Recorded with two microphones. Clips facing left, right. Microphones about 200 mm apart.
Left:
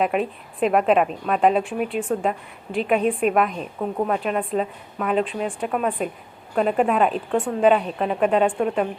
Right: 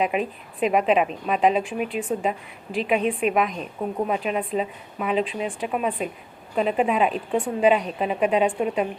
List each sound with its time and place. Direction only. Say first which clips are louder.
0.0 s a woman's voice: left 2 dB; centre (ahead or behind)